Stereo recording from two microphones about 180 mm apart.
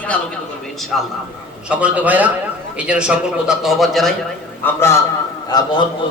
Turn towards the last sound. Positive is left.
turn(degrees=25)  # may be behind; listen again after turning